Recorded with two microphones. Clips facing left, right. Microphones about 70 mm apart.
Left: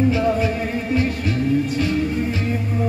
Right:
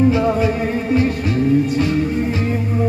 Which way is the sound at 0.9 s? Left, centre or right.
Right.